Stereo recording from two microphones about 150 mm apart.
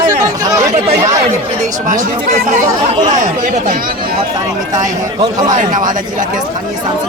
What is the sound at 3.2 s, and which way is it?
Speech, 55° right (ahead or behind).